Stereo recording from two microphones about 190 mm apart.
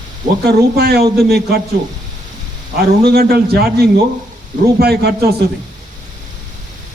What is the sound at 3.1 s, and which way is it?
A man's voice, 55° right (ahead or behind).